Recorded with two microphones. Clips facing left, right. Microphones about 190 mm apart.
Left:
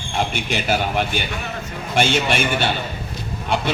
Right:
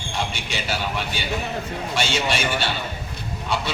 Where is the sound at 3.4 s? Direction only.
50° left (ahead or behind).